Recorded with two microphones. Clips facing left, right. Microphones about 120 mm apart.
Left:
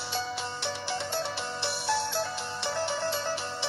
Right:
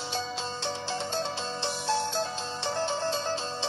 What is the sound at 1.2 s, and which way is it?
Music, 20° right (ahead or behind).